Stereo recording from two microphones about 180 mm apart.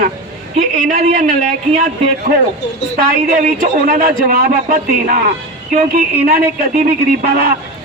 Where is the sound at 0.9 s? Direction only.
45° right (ahead or behind).